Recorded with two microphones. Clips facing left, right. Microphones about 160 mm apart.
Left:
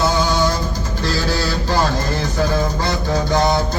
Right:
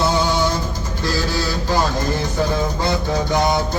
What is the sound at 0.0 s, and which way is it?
Mantra, 25° right (ahead or behind).